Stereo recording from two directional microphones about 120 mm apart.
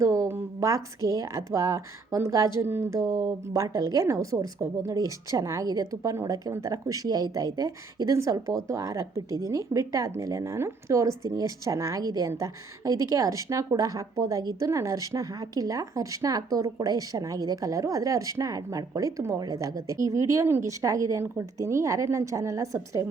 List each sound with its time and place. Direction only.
0.0 s speech: 25° right (ahead or behind)